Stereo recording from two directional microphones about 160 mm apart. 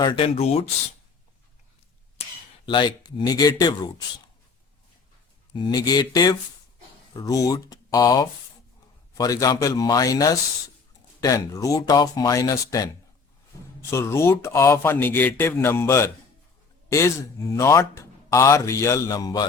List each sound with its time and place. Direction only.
0.0 s speech: 30° left (ahead or behind)
2.6 s speech: 30° left (ahead or behind)
5.5 s speech: 25° left (ahead or behind)
13.9 s speech: 15° left (ahead or behind)